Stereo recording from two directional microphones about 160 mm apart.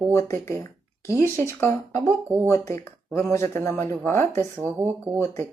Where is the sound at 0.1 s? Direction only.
15° left (ahead or behind).